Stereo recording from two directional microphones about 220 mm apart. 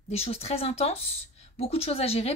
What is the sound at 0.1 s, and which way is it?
Speech, 25° left (ahead or behind).